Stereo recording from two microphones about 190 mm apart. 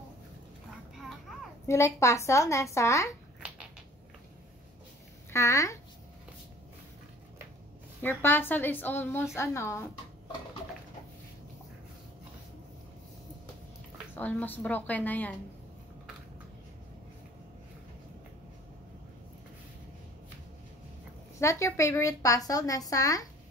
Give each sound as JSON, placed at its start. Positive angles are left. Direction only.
{"t": 1.7, "sound": "a woman's voice", "side_deg": 15}
{"t": 5.3, "sound": "a woman's voice", "side_deg": 15}
{"t": 8.0, "sound": "a woman's voice", "side_deg": 10}
{"t": 14.1, "sound": "a woman's voice", "side_deg": 10}
{"t": 21.4, "sound": "a woman's voice", "side_deg": 15}